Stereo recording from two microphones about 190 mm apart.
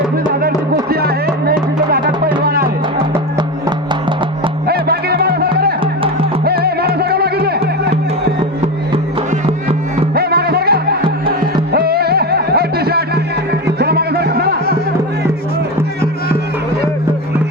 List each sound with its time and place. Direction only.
0.4 s music: 55° right (ahead or behind)
4.7 s music: 55° right (ahead or behind)
10.2 s music: 55° right (ahead or behind)